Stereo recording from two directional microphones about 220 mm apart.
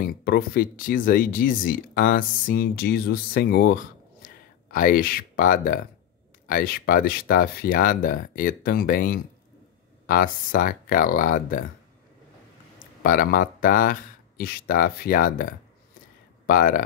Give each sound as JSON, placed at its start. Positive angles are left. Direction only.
{"t": 0.0, "sound": "speech", "side_deg": 45}
{"t": 4.2, "sound": "a sound", "side_deg": 35}
{"t": 4.6, "sound": "speech", "side_deg": 40}
{"t": 13.0, "sound": "speech", "side_deg": 40}
{"t": 16.4, "sound": "speech", "side_deg": 40}